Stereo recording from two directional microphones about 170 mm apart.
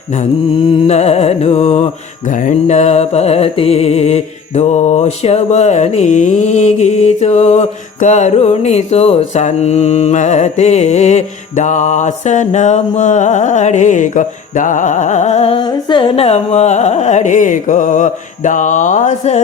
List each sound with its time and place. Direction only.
0.9 s mantra: 40° left (ahead or behind)